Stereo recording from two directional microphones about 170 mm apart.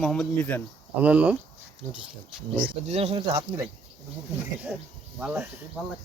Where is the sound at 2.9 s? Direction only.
35° right (ahead or behind).